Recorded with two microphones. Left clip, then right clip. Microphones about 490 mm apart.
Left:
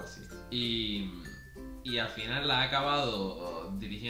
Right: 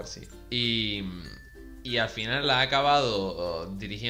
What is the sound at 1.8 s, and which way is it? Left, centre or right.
Speech, right.